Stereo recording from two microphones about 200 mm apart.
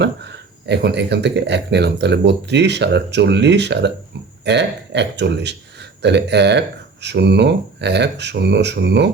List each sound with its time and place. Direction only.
0.0 s speech: 60° right (ahead or behind)